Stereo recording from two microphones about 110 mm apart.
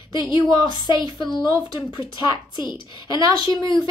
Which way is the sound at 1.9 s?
45° left (ahead or behind).